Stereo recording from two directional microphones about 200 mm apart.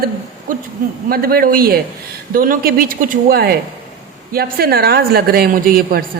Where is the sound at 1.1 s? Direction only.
50° right (ahead or behind).